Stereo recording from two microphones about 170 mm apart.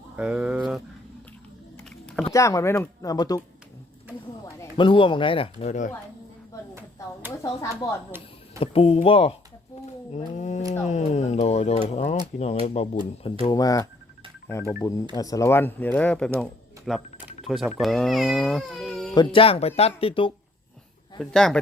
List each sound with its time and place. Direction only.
0.2 s a sound: 5° right (ahead or behind)
2.3 s speech: 20° left (ahead or behind)
4.8 s speech: 30° left (ahead or behind); by 5.9 s 45° left (ahead or behind)
7.4 s speech: 15° left (ahead or behind)
8.5 s speech: 35° left (ahead or behind)
9.8 s a sound: 40° left (ahead or behind)
10.8 s speech: 40° left (ahead or behind)
13.5 s speech: 20° left (ahead or behind)
16.4 s a sound: centre (ahead or behind)
17.4 s speech: centre (ahead or behind)
19.1 s speech: 30° left (ahead or behind)
21.2 s speech: 5° left (ahead or behind)